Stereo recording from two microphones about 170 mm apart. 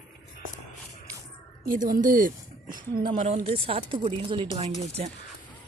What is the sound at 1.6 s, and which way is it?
A woman's voice, 55° right (ahead or behind).